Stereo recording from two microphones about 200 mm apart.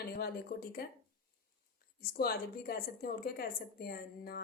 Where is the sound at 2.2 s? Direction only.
50° left (ahead or behind).